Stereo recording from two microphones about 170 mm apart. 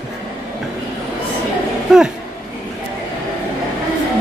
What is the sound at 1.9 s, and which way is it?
Speech, centre (ahead or behind).